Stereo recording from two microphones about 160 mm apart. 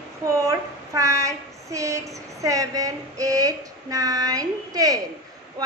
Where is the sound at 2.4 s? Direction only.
20° right (ahead or behind).